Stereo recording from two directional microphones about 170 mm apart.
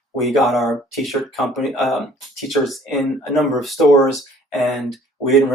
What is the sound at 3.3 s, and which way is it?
Speech, centre (ahead or behind).